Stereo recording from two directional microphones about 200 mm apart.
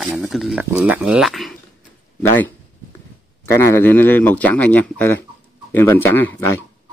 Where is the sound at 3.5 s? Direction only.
15° left (ahead or behind).